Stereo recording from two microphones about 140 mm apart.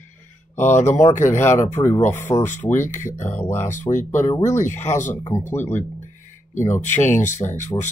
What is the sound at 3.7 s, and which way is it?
Speech, 60° left (ahead or behind).